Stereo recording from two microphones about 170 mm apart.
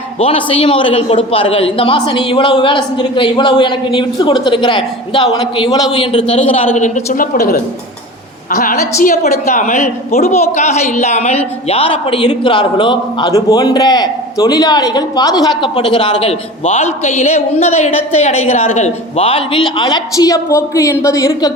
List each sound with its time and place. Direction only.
0.2 s a man's voice: 30° left (ahead or behind)
16.2 s a man's voice: 40° left (ahead or behind); by 21.5 s 20° left (ahead or behind)